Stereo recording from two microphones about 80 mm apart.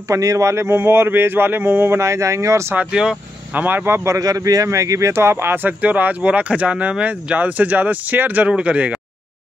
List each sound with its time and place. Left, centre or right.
0.1 s speech: right
2.0 s speech: right
2.7 s speech: centre
3.6 s speech: right
4.2 s speech: right; by 9.0 s centre